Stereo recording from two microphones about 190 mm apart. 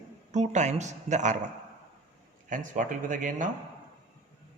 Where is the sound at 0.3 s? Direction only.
40° right (ahead or behind).